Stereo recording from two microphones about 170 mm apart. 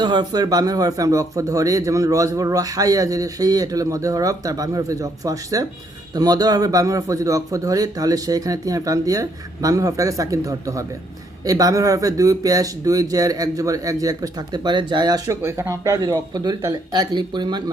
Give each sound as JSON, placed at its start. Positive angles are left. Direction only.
{"t": 0.0, "sound": "speech", "side_deg": -25}